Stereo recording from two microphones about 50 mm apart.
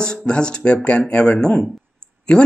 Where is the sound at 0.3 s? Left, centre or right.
Centre.